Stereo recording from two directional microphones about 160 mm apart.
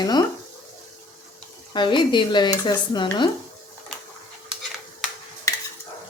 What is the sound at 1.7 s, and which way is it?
Speech, 30° left (ahead or behind).